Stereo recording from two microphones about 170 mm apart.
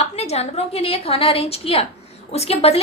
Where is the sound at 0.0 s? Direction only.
40° left (ahead or behind).